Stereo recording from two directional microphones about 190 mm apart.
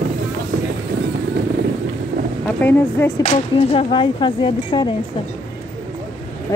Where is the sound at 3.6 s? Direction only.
30° left (ahead or behind).